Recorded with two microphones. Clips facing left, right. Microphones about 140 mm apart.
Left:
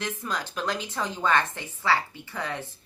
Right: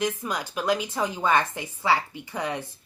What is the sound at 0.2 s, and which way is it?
A woman's voice, 15° right (ahead or behind).